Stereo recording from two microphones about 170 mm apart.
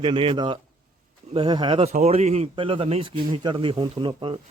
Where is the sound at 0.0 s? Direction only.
30° right (ahead or behind).